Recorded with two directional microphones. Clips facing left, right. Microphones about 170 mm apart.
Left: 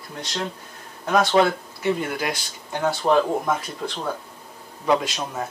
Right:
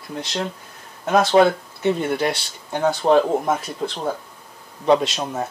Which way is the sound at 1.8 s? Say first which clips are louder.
Right 4 dB; 30° right (ahead or behind).